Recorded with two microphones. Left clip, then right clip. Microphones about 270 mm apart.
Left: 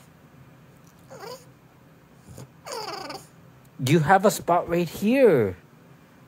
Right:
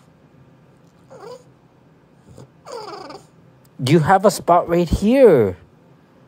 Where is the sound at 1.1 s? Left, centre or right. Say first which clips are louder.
Right 2 dB; left.